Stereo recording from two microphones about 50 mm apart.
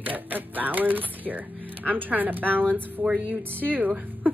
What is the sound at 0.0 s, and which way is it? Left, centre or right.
A woman's voice, right.